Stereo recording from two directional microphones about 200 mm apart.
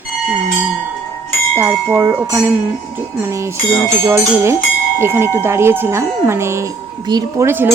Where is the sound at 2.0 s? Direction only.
10° right (ahead or behind).